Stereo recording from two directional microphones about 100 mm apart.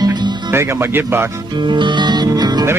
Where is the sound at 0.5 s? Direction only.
25° right (ahead or behind).